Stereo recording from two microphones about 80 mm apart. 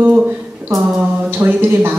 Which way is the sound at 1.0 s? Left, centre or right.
Right.